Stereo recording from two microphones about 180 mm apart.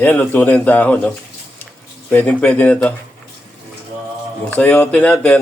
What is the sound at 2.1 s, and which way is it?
Speech, 10° left (ahead or behind).